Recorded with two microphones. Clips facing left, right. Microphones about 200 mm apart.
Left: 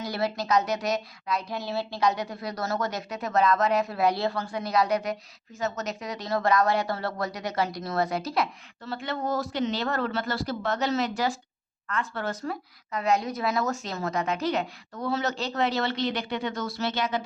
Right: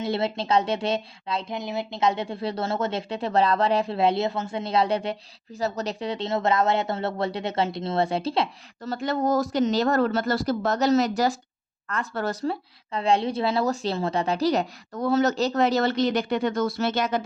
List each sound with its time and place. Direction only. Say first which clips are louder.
0.0 s a woman's voice: right 3 dB; 25° right (ahead or behind)
8.8 s speech: right 6 dB; 40° right (ahead or behind)